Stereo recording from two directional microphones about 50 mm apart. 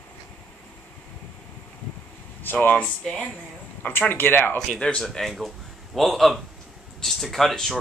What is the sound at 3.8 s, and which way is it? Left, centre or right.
Speech, left.